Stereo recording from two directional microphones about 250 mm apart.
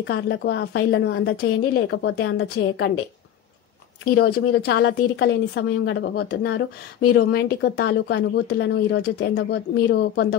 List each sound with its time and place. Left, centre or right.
0.0 s a woman's voice: left
4.0 s a woman's voice: left